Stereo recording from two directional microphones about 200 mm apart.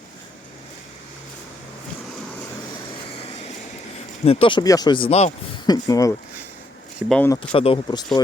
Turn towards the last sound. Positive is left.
turn(degrees=25)  # may be behind; listen again after turning